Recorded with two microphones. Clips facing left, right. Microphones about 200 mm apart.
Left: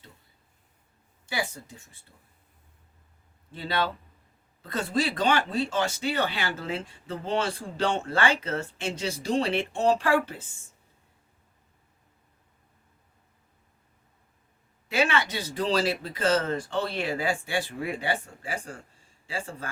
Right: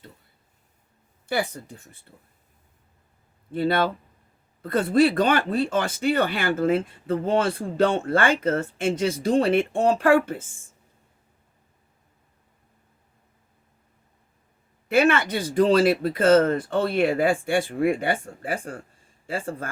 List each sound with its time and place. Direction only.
1.3 s speech: 60° right (ahead or behind)
3.5 s speech: 55° right (ahead or behind)
14.8 s speech: 55° right (ahead or behind)